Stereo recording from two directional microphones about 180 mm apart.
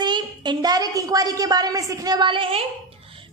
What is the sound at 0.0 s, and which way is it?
A woman's voice, 25° right (ahead or behind).